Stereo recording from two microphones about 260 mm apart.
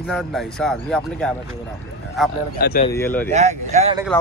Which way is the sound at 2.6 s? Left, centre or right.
Left.